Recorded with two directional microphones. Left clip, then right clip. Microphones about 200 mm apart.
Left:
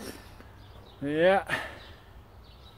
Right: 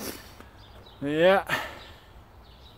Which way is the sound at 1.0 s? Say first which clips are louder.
Right 2 dB; 15° right (ahead or behind).